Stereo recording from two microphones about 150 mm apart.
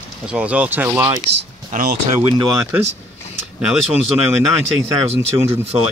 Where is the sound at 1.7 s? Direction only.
70° right (ahead or behind).